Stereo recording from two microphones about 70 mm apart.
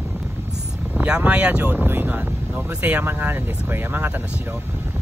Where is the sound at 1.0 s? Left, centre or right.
Centre.